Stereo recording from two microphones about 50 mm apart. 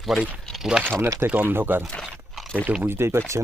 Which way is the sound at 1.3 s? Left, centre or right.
Right.